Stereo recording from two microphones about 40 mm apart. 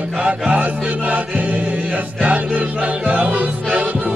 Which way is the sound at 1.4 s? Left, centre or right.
Right.